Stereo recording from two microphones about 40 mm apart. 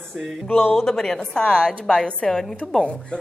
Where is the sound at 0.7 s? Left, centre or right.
Centre.